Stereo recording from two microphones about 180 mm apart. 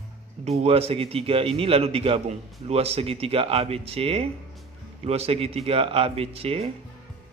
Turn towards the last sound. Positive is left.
turn(degrees=-35)  # may be behind; listen again after turning